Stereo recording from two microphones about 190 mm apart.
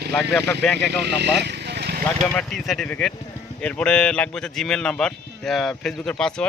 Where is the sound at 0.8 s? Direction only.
60° right (ahead or behind).